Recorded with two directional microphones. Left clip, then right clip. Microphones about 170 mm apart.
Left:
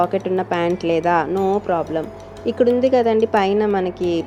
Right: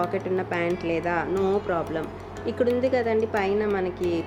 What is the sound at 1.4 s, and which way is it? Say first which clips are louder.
Speech: left 6 dB; 30° left (ahead or behind).